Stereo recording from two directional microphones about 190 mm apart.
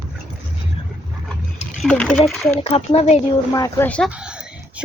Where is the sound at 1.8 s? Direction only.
5° left (ahead or behind).